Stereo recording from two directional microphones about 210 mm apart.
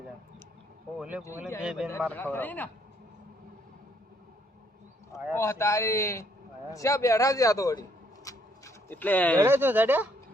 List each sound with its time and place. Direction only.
0.9 s a man's voice: 5° right (ahead or behind)
2.0 s a man's voice: 10° left (ahead or behind)
5.4 s a man's voice: 10° left (ahead or behind)
9.4 s speech: 10° right (ahead or behind)